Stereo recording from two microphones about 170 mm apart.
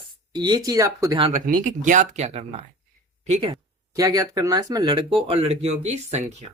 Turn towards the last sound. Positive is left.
turn(degrees=-40)  # may be behind; listen again after turning